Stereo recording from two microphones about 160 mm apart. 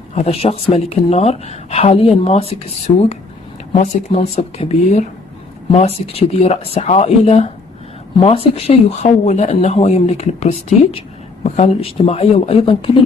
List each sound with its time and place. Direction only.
0.1 s speech: 40° left (ahead or behind)